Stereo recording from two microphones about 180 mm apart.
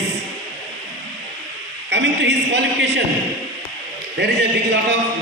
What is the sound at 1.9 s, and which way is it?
A man's voice, 75° right (ahead or behind).